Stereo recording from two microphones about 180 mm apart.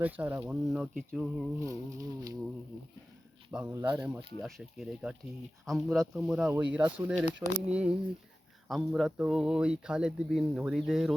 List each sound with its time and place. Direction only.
0.0 s speech: 10° right (ahead or behind)
1.6 s a sound: 20° right (ahead or behind)
3.5 s a man's voice: 10° right (ahead or behind)